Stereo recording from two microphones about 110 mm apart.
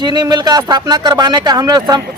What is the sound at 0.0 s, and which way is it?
Speech, 40° right (ahead or behind).